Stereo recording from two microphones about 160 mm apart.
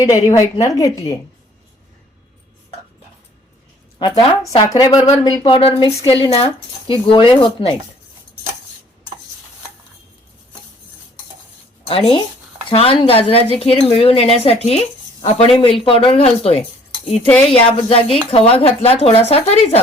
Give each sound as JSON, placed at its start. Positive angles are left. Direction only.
{"t": 0.0, "sound": "a woman's voice", "side_deg": 25}
{"t": 3.9, "sound": "a woman's voice", "side_deg": 35}
{"t": 11.9, "sound": "speech", "side_deg": 35}